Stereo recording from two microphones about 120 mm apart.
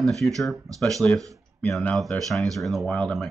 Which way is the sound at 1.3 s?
Centre (ahead or behind).